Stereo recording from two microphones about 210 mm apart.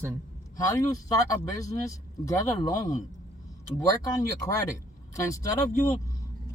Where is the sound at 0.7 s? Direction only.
15° left (ahead or behind).